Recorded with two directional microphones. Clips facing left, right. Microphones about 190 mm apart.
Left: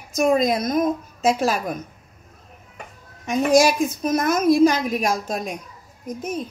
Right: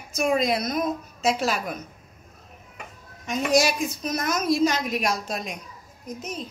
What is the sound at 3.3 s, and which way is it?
A woman's voice, 50° left (ahead or behind).